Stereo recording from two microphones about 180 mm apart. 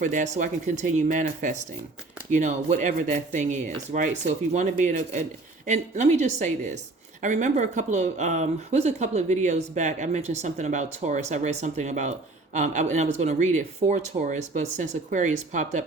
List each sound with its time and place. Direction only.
0.0 s speech: 45° right (ahead or behind)